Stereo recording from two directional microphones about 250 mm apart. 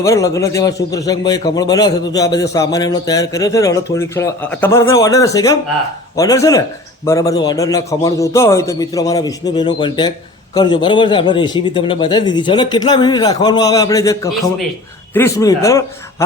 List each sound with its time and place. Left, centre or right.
0.0 s a man's voice: centre